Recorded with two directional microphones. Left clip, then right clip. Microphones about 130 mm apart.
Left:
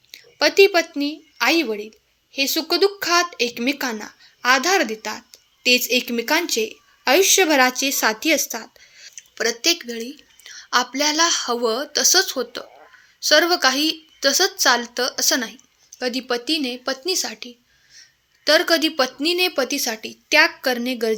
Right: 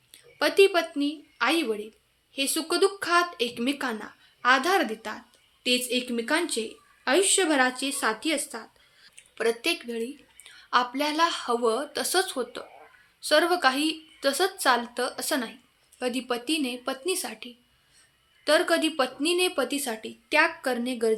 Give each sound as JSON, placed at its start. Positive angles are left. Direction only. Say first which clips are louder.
{"t": 0.1, "sound": "speech", "louder": "left 7 dB", "side_deg": 30}